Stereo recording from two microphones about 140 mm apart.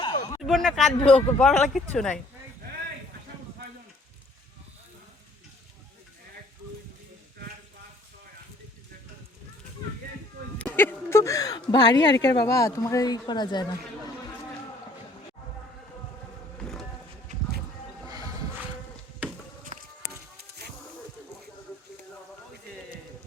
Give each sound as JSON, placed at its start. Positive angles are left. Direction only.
{"t": 0.0, "sound": "a sound", "side_deg": 35}
{"t": 0.4, "sound": "speech", "side_deg": 0}
{"t": 10.8, "sound": "a woman's voice", "side_deg": 20}
{"t": 16.6, "sound": "a sound", "side_deg": 5}
{"t": 18.1, "sound": "music", "side_deg": -30}
{"t": 19.7, "sound": "walk", "side_deg": -65}